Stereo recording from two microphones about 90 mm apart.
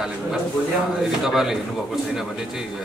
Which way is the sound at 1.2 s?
5° right (ahead or behind).